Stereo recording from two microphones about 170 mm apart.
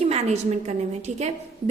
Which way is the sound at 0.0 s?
40° right (ahead or behind).